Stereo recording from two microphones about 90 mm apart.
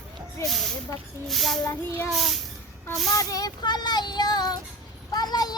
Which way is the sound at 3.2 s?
40° left (ahead or behind).